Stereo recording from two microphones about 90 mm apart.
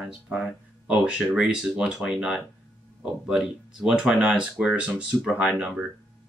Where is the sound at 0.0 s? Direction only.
10° right (ahead or behind).